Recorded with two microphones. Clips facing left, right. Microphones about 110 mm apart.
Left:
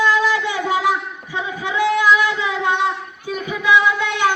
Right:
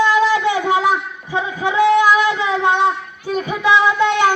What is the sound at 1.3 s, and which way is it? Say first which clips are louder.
Child singing: right 5 dB; 25° right (ahead or behind).